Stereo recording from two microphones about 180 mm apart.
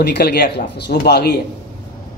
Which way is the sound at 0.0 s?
65° left (ahead or behind).